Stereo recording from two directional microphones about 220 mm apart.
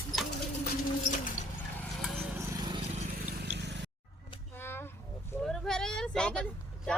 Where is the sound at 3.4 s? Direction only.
50° right (ahead or behind).